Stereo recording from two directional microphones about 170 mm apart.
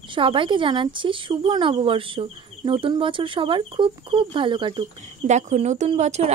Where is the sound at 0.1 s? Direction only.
30° right (ahead or behind).